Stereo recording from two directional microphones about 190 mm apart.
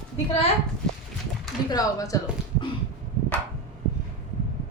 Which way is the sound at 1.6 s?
20° left (ahead or behind).